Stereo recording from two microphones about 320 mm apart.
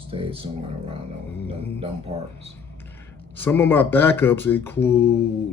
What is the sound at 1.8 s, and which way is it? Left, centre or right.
Speech, centre.